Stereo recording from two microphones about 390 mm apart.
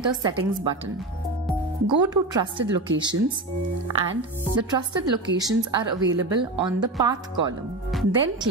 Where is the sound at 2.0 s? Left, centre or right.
Centre.